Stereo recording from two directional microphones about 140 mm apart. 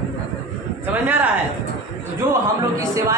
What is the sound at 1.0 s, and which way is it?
Speech, 10° right (ahead or behind).